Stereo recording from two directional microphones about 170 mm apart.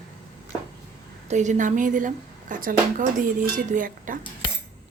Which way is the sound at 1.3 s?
45° right (ahead or behind).